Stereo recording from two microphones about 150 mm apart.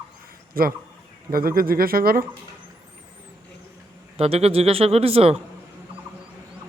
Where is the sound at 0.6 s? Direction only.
75° right (ahead or behind).